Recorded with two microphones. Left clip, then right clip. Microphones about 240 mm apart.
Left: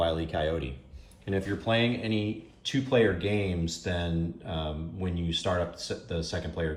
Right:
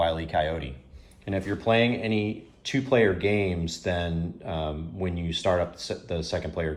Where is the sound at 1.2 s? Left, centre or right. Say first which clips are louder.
Right 3 dB; centre.